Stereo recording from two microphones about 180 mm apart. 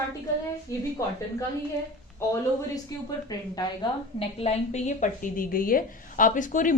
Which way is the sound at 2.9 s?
20° left (ahead or behind).